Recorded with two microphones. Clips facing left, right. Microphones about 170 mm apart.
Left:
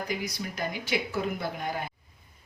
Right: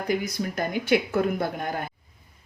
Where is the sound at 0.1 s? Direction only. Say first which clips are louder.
Right 7 dB; 50° right (ahead or behind).